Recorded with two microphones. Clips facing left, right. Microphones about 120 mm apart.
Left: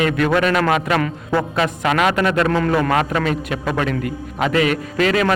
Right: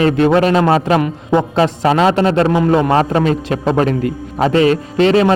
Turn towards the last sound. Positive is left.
turn(degrees=-30)  # may be behind; listen again after turning